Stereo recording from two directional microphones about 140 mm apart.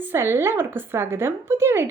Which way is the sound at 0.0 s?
15° right (ahead or behind).